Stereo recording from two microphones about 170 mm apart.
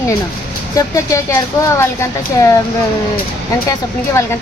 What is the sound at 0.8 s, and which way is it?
Speech, 20° left (ahead or behind).